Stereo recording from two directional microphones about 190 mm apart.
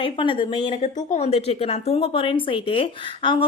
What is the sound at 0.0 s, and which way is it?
A woman's voice, 25° left (ahead or behind).